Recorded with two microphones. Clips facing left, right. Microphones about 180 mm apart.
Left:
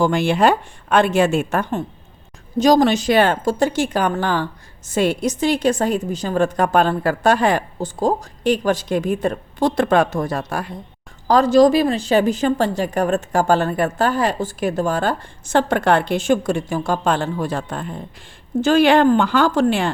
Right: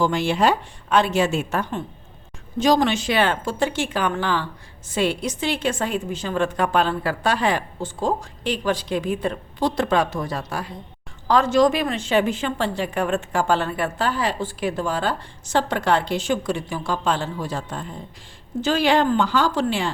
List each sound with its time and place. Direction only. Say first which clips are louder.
0.0 s a woman's voice: left 4 dB; 55° left (ahead or behind)
2.6 s a woman's voice: left 5 dB; 40° left (ahead or behind)
11.3 s a woman's voice: left 5 dB; 35° left (ahead or behind); by 19.9 s 50° left (ahead or behind)